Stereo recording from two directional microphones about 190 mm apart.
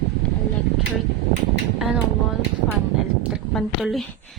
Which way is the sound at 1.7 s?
Centre (ahead or behind).